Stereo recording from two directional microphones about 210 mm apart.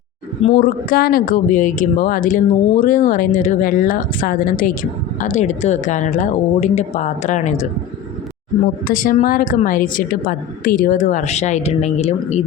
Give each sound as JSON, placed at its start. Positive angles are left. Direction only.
{"t": 0.6, "sound": "speech", "side_deg": 45}
{"t": 8.9, "sound": "speech", "side_deg": 40}